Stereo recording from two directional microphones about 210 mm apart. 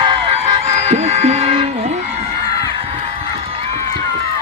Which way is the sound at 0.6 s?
30° right (ahead or behind).